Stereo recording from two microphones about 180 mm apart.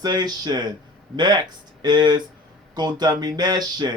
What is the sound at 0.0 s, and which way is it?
Speech, 20° right (ahead or behind).